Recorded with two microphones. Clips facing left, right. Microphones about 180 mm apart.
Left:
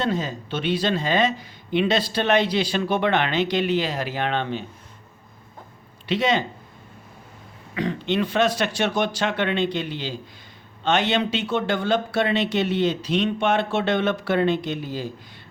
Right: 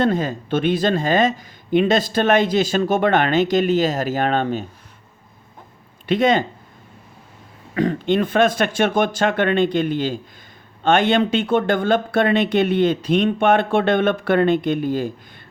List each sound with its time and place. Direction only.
0.0 s speech: 55° right (ahead or behind)
6.1 s speech: 50° right (ahead or behind)
7.8 s speech: 50° right (ahead or behind)